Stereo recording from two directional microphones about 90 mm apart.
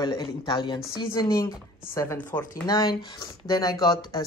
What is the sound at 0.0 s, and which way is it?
Speech, 50° left (ahead or behind).